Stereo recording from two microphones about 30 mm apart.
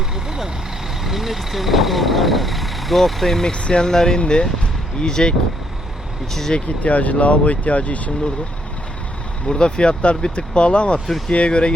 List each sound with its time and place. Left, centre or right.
0.3 s speech: centre
1.0 s speech: centre
3.4 s speech: left
4.2 s speech: left
6.5 s speech: left
6.8 s speech: left
9.5 s speech: left